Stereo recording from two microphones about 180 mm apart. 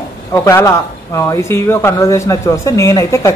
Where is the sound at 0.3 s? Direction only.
15° left (ahead or behind).